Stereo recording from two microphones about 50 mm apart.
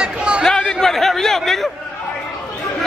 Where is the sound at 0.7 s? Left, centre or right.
Centre.